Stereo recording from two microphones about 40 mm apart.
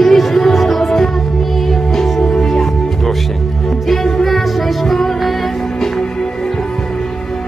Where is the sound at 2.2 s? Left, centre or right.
Centre.